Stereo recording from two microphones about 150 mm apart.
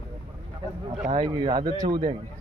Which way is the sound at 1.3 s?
25° right (ahead or behind).